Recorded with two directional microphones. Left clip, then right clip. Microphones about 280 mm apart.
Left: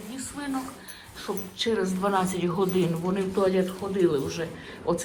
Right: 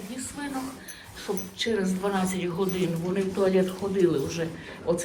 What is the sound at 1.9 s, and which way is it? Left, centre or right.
Speech, centre.